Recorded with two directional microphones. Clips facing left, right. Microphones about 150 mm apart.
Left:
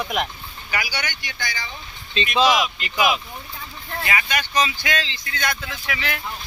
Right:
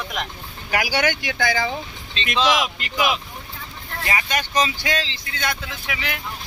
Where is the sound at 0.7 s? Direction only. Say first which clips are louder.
Right 7 dB; 90° right.